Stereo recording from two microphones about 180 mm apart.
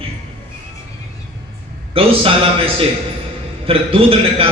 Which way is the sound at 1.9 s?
30° right (ahead or behind).